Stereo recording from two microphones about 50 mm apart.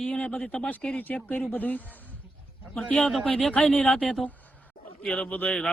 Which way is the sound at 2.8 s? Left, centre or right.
Centre.